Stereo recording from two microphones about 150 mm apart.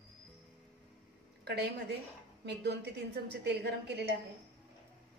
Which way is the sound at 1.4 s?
90° right.